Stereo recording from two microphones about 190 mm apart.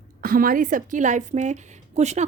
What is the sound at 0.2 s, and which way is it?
A woman's voice, 50° right (ahead or behind).